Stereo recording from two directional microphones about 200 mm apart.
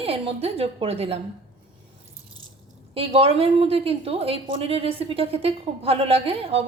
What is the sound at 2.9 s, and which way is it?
A woman's voice, 30° right (ahead or behind).